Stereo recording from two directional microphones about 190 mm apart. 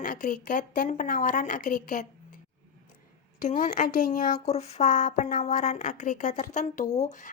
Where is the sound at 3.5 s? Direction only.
40° left (ahead or behind).